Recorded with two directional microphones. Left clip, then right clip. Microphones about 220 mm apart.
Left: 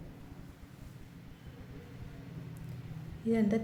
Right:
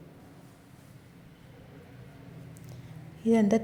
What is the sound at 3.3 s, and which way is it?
Speech, 35° right (ahead or behind).